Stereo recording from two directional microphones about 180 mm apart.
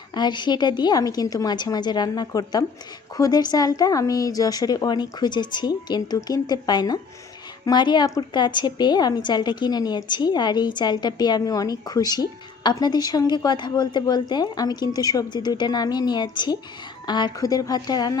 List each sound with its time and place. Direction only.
0.1 s a woman's voice: 25° left (ahead or behind)